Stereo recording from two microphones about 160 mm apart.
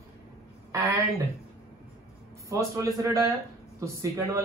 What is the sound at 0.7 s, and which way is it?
Speech, 20° right (ahead or behind).